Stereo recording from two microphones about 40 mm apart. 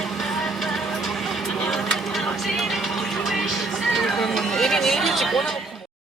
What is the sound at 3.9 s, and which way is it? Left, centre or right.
Run, centre.